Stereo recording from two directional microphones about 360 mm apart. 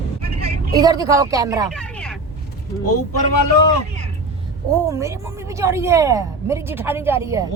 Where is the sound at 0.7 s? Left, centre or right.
Centre.